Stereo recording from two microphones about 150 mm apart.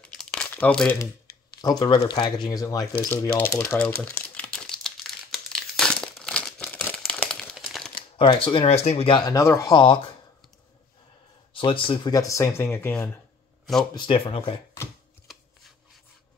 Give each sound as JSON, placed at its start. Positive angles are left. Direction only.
{"t": 0.0, "sound": "crumpling", "side_deg": 5}
{"t": 1.6, "sound": "speech", "side_deg": 25}
{"t": 3.8, "sound": "crumpling", "side_deg": 10}
{"t": 7.9, "sound": "speech", "side_deg": 35}
{"t": 9.3, "sound": "speech", "side_deg": 20}
{"t": 11.5, "sound": "speech", "side_deg": 35}
{"t": 13.9, "sound": "speech", "side_deg": 35}